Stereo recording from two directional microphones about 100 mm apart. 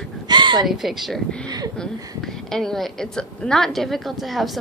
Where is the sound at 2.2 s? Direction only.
5° left (ahead or behind).